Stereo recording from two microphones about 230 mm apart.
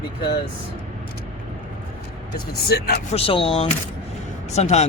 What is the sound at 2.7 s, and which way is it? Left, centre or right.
Speech, left.